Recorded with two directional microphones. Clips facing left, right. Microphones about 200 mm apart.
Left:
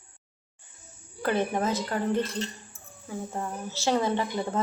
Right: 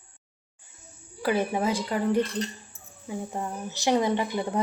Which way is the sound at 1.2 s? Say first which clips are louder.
Right 1 dB; 10° right (ahead or behind).